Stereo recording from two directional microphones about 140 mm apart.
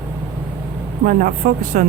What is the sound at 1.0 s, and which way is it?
Speech, 90° right.